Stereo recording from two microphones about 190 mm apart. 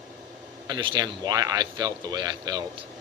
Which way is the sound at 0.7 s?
25° right (ahead or behind).